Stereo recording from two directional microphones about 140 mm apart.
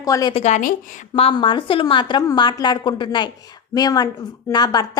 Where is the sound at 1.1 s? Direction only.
40° left (ahead or behind).